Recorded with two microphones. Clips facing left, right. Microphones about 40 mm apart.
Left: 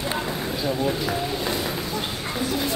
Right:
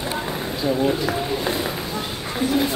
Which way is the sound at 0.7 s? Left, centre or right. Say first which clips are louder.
Right 5 dB; centre.